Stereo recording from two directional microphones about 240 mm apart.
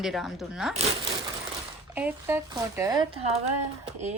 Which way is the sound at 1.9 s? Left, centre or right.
Centre.